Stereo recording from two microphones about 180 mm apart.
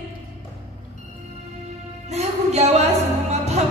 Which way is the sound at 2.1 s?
35° right (ahead or behind).